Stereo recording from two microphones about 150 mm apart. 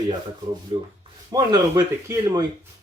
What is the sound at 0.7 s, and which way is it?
Speech, 35° right (ahead or behind).